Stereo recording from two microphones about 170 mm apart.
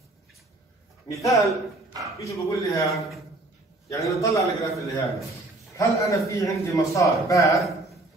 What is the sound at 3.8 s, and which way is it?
Speech, 20° left (ahead or behind).